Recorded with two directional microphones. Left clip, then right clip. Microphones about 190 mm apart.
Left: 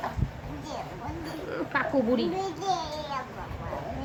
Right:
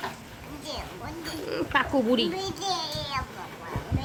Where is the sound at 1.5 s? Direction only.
50° right (ahead or behind).